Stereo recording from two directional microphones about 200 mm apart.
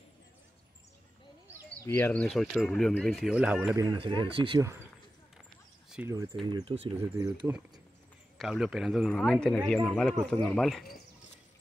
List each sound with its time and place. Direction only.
1.9 s speech: 10° left (ahead or behind); by 3.7 s 5° right (ahead or behind)
3.7 s speech: 20° right (ahead or behind)
6.0 s speech: 15° right (ahead or behind)
7.0 s speech: 15° right (ahead or behind)
8.4 s speech: centre (ahead or behind)